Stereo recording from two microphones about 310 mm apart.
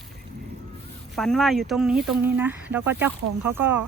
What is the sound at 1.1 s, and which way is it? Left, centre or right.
Speech, centre.